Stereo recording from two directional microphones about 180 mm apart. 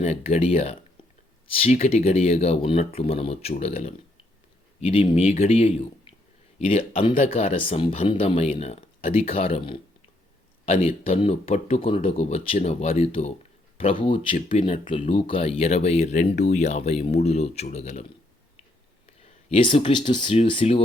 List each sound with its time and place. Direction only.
0.0 s speech: 40° left (ahead or behind)
19.5 s speech: 30° left (ahead or behind)